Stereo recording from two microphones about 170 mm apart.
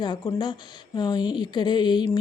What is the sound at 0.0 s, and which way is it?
A woman's voice, 25° left (ahead or behind).